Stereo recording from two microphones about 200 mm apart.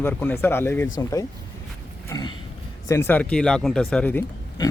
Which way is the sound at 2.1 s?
20° left (ahead or behind).